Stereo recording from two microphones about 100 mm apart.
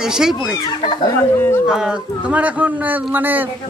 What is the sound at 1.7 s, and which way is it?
Speech, 5° right (ahead or behind).